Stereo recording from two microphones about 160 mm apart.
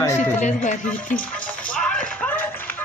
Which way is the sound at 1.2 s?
10° left (ahead or behind).